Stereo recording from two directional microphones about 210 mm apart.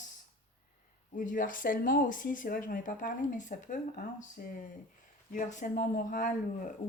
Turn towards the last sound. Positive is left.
turn(degrees=40)  # may be behind; listen again after turning